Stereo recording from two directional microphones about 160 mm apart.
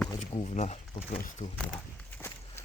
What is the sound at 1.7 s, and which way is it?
Walk, 10° left (ahead or behind).